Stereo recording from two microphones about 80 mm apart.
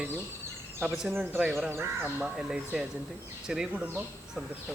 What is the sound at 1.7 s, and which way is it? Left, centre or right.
Speech, right.